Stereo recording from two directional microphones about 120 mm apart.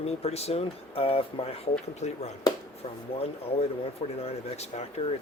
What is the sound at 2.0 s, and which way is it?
Speech, 70° left (ahead or behind).